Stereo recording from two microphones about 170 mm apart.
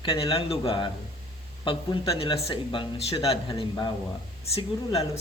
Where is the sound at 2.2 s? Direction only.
30° left (ahead or behind).